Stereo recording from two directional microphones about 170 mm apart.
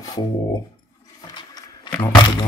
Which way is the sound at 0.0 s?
20° left (ahead or behind).